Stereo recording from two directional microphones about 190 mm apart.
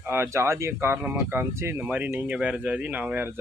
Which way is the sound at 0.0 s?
10° right (ahead or behind).